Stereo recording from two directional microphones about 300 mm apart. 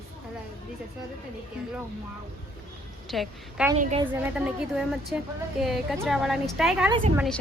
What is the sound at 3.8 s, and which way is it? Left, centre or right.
Speech, right.